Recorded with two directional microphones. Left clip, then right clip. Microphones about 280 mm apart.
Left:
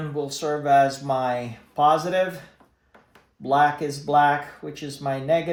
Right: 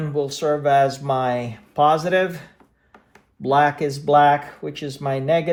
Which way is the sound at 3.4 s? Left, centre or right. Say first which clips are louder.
Right 2 dB; right.